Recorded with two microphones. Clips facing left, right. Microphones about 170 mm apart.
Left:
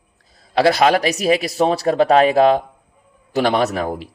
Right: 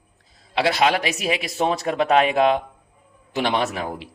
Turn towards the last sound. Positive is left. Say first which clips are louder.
# left 6 dB
turn(degrees=40)  # may be behind; listen again after turning